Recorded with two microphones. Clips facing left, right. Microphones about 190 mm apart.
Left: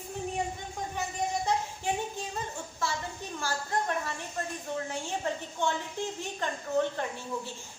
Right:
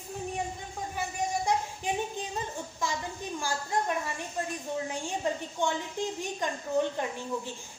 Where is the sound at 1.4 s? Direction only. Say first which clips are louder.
Right 1 dB; 15° right (ahead or behind).